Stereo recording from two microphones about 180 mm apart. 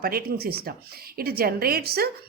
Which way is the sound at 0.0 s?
55° right (ahead or behind).